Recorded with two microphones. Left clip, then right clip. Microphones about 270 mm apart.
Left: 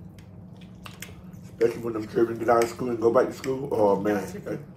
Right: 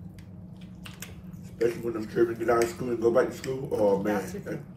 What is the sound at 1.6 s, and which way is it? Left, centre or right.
Speech, centre.